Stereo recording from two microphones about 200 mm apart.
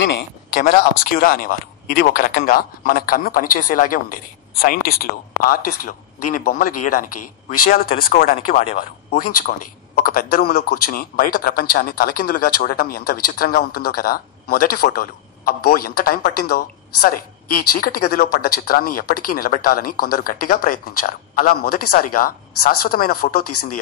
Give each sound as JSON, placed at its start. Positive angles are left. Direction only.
{"t": 0.5, "sound": "a man's voice", "side_deg": 45}